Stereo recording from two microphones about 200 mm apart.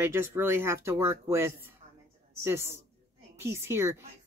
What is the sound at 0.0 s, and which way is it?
Speech, 10° right (ahead or behind).